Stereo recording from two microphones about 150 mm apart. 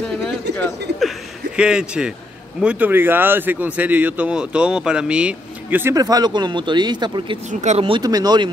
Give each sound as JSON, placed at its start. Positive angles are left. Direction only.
{"t": 1.6, "sound": "speech", "side_deg": -5}
{"t": 5.9, "sound": "speech", "side_deg": -25}
{"t": 7.6, "sound": "speech", "side_deg": -40}
{"t": 8.0, "sound": "speech", "side_deg": -25}